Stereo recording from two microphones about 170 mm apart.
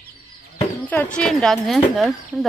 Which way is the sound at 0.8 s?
10° left (ahead or behind).